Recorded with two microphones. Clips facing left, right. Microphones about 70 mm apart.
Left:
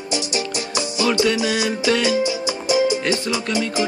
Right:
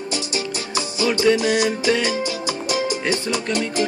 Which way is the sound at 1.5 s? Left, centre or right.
Right.